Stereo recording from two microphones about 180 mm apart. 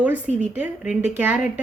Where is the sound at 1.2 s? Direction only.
10° right (ahead or behind).